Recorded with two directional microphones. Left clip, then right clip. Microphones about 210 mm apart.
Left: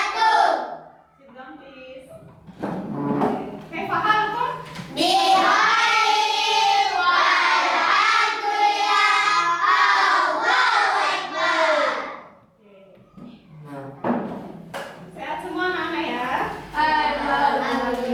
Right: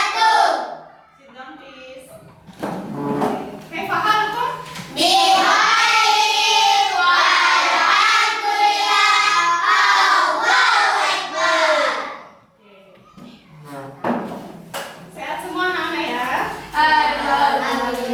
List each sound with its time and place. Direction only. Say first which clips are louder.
0.1 s a sound: right 1 dB; 5° left (ahead or behind)
2.7 s music: right 1 dB; 20° left (ahead or behind)
3.2 s music: right 2 dB; 10° left (ahead or behind)
3.7 s a sound: right 3 dB; 10° left (ahead or behind)
4.2 s child singing: right 2 dB; 10° left (ahead or behind)
8.9 s music: right 3 dB; 10° left (ahead or behind)
9.6 s crowd: right 3 dB; 5° left (ahead or behind)
10.3 s child singing: right 3 dB; 10° left (ahead or behind)
14.0 s a sound: right 2 dB; 10° left (ahead or behind)